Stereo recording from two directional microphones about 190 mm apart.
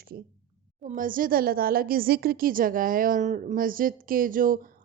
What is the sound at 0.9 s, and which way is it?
A woman's voice, 45° right (ahead or behind).